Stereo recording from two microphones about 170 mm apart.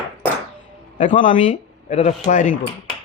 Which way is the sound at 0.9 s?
45° left (ahead or behind).